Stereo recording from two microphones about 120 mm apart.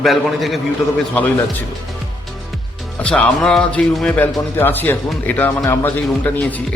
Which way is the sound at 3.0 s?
10° left (ahead or behind).